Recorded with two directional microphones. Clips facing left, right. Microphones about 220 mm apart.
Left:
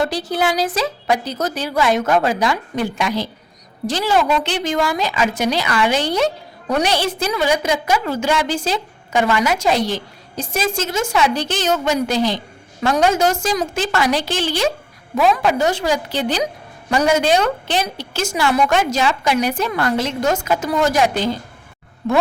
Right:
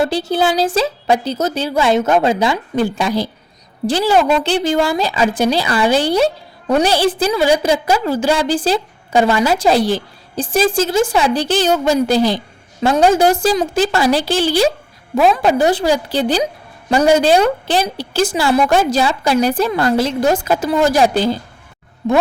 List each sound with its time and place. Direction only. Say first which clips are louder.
0.0 s a woman's voice: right 4 dB; 25° right (ahead or behind)